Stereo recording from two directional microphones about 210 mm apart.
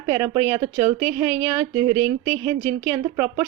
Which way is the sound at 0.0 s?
15° right (ahead or behind).